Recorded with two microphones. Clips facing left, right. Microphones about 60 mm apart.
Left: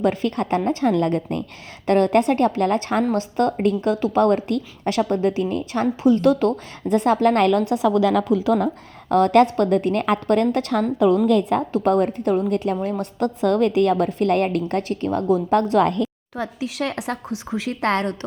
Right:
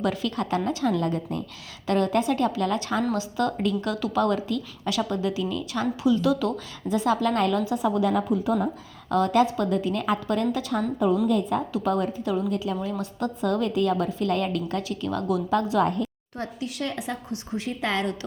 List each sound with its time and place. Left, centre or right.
0.0 s a woman's voice: left
4.2 s a woman's voice: left
9.0 s a woman's voice: left
11.7 s a woman's voice: left
15.7 s a woman's voice: left
16.6 s a woman's voice: left
17.8 s a woman's voice: left